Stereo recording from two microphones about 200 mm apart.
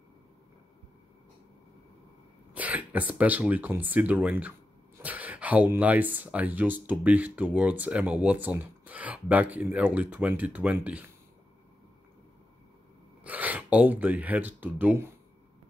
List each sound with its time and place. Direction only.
2.5 s speech: 5° right (ahead or behind)
13.2 s speech: 10° right (ahead or behind)